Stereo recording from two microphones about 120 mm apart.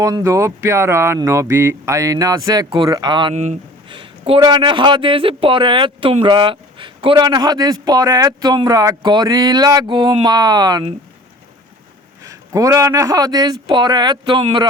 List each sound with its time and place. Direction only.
0.0 s speech: 25° right (ahead or behind)
3.3 s speech: 75° right (ahead or behind)
3.8 s a man's voice: 45° right (ahead or behind)
12.2 s a man's voice: 30° right (ahead or behind)